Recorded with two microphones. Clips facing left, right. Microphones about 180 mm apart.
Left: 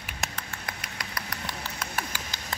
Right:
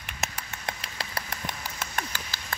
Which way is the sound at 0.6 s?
30° right (ahead or behind).